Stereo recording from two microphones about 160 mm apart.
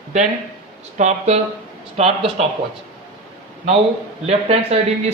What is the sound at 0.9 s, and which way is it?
A man's voice, 45° right (ahead or behind).